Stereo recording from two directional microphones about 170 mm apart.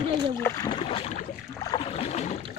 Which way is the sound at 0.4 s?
20° left (ahead or behind).